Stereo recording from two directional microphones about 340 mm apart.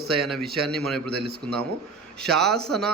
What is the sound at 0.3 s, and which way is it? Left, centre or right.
Speech, centre.